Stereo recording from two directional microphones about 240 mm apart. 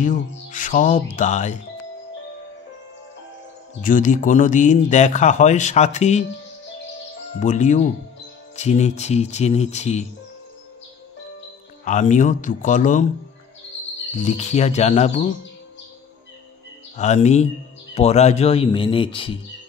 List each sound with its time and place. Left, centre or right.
0.0 s speech: left
3.8 s speech: left
7.3 s speech: left
11.8 s speech: left
14.1 s speech: left
16.9 s speech: left